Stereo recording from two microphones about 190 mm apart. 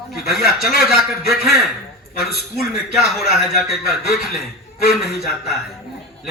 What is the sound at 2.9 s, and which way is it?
A man's voice, centre (ahead or behind).